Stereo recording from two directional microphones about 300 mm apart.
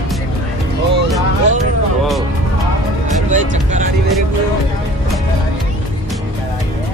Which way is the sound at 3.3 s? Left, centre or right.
Right.